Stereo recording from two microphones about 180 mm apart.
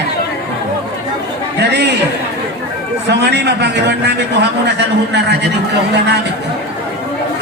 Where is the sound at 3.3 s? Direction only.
70° right (ahead or behind).